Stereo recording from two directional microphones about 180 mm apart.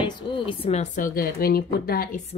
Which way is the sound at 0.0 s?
30° left (ahead or behind).